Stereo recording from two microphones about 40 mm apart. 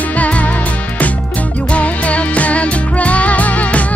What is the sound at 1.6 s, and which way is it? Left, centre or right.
Music, left.